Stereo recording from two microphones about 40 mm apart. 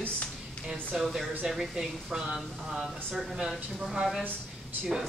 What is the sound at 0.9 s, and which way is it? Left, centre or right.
Speech, centre.